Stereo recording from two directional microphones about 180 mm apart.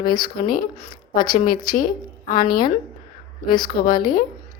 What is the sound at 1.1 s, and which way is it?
Speech, 50° left (ahead or behind).